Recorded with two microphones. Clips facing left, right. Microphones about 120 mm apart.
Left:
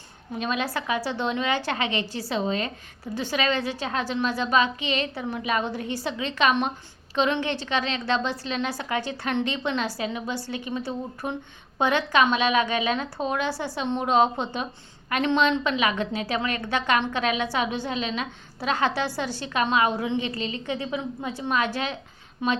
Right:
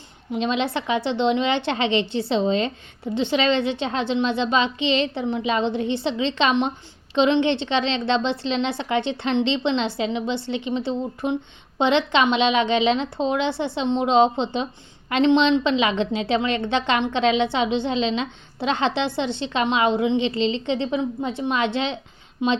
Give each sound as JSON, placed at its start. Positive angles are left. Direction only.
{"t": 0.3, "sound": "a woman's voice", "side_deg": -25}